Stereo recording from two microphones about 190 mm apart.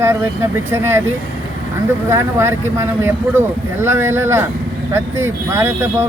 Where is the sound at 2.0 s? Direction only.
15° right (ahead or behind).